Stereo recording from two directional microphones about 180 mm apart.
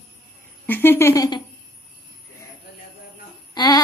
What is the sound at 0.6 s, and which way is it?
Speech, 10° left (ahead or behind).